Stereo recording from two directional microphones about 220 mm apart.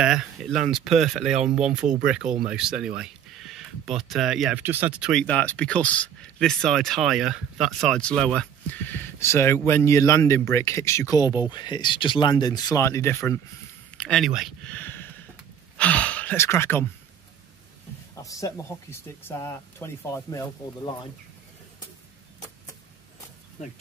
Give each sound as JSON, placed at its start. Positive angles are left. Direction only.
{"t": 0.0, "sound": "speech", "side_deg": -5}
{"t": 18.1, "sound": "speech", "side_deg": 15}